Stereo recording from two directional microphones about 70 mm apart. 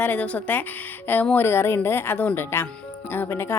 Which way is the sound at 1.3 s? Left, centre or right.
Left.